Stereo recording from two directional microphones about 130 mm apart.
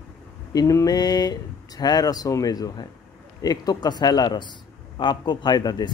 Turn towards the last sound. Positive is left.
turn(degrees=30)  # may be behind; listen again after turning